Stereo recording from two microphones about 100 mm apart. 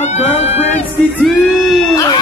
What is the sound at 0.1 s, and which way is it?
Music, 90° left.